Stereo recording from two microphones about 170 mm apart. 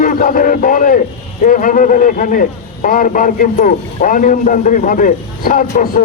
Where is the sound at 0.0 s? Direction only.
55° left (ahead or behind).